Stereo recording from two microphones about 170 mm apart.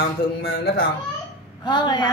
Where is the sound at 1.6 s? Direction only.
25° left (ahead or behind).